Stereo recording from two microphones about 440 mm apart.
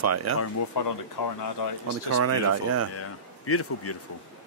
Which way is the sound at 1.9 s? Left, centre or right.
Right.